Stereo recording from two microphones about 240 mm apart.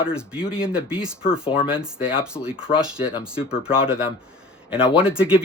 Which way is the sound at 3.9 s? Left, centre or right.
Centre.